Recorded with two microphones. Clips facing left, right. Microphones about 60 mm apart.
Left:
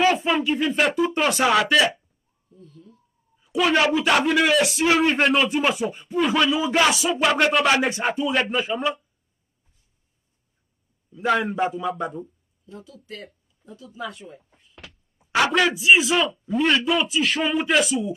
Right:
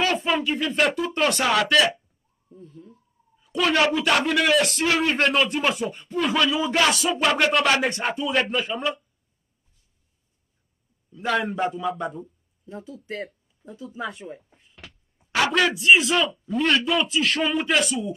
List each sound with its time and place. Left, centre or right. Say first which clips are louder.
0.0 s speech: left 3 dB; centre
2.5 s speech: right 3 dB; right
3.4 s a sound: left 2 dB; centre
3.9 s speech: left 2 dB; centre
11.1 s speech: left 3 dB; centre
12.6 s speech: right 4 dB; right
13.0 s speech: right 6 dB; right
14.5 s speech: left 1 dB; centre